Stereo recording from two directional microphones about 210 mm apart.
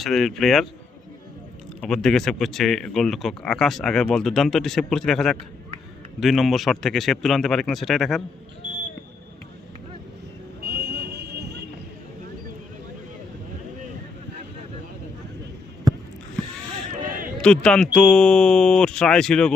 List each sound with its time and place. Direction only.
0.0 s speech: centre (ahead or behind)
1.8 s speech: centre (ahead or behind)
10.6 s vehicle: 50° right (ahead or behind)
17.4 s speech: 5° left (ahead or behind)